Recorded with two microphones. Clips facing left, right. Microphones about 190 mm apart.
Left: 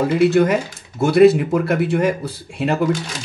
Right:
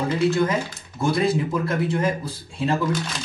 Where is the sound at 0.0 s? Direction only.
70° left (ahead or behind).